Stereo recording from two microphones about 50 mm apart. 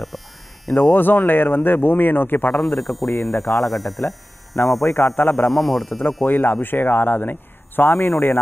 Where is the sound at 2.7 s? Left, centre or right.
Centre.